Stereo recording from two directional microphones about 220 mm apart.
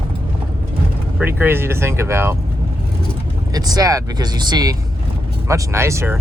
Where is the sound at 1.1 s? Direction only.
10° right (ahead or behind).